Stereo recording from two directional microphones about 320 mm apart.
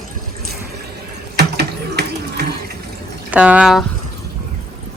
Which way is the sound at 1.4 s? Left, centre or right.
Right.